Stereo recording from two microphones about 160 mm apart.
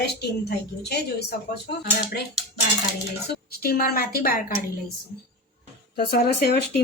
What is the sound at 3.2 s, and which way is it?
A woman's voice, 70° left (ahead or behind).